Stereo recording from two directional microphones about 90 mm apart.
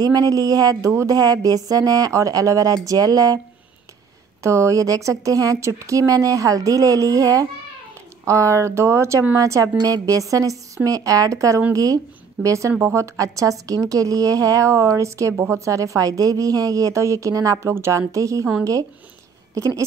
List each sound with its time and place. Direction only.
0.0 s speech: 45° right (ahead or behind)
4.4 s speech: 35° right (ahead or behind)